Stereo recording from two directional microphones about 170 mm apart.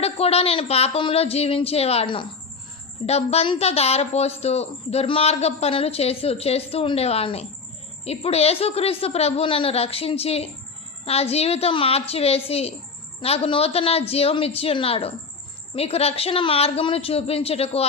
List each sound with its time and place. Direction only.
0.0 s a woman's voice: 35° left (ahead or behind)